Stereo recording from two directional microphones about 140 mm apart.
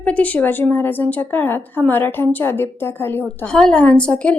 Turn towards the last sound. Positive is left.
turn(degrees=5)  # may be behind; listen again after turning